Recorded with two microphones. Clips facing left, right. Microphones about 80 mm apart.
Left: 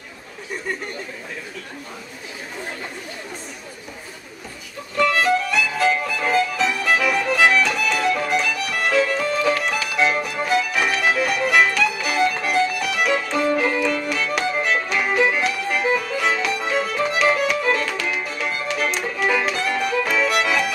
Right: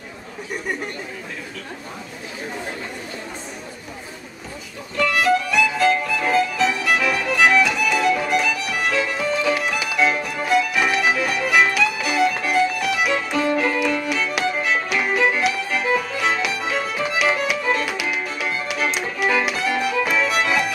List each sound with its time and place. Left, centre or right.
5.1 s music: centre
9.9 s music: centre